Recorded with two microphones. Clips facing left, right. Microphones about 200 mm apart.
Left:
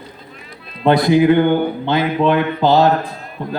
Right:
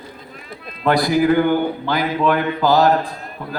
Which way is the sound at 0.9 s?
25° left (ahead or behind).